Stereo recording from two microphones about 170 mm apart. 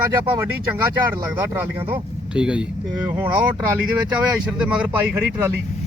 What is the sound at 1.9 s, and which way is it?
Speech, 5° right (ahead or behind).